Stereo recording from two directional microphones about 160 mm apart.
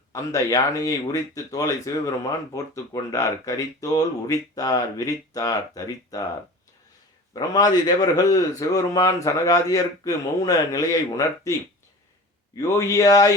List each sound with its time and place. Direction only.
0.1 s a man's voice: 20° left (ahead or behind)
7.3 s a man's voice: 25° left (ahead or behind)
12.5 s a man's voice: 20° left (ahead or behind)